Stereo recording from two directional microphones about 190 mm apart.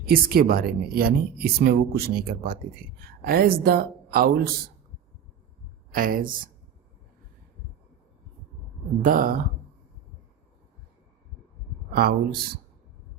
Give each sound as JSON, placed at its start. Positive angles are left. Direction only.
{"t": 0.1, "sound": "speech", "side_deg": -50}
{"t": 5.9, "sound": "speech", "side_deg": -45}
{"t": 9.0, "sound": "speech", "side_deg": -45}
{"t": 11.9, "sound": "speech", "side_deg": -55}